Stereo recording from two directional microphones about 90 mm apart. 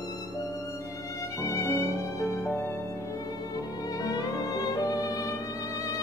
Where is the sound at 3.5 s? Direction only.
45° left (ahead or behind).